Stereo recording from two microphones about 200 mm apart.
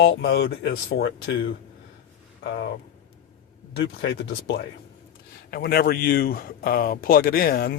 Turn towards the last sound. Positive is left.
turn(degrees=50)  # may be behind; listen again after turning